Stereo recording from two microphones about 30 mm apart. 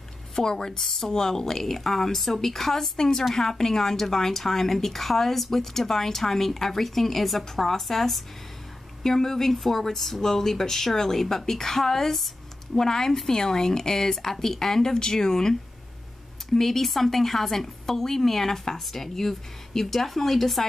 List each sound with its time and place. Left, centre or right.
0.4 s a woman's voice: centre
16.5 s a woman's voice: centre